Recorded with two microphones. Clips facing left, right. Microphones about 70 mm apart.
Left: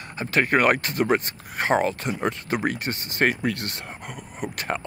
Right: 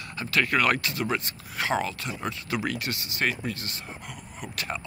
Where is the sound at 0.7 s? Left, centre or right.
Left.